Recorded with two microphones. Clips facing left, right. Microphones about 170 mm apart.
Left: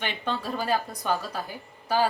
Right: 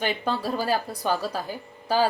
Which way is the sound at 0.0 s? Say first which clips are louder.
Right 4 dB; 35° right (ahead or behind).